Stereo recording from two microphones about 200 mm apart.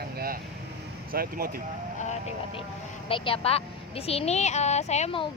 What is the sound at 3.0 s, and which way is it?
Speech, 25° left (ahead or behind).